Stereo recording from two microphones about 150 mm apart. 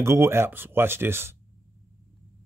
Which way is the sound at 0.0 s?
15° right (ahead or behind).